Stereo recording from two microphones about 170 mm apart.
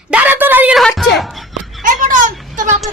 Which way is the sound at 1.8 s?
50° right (ahead or behind).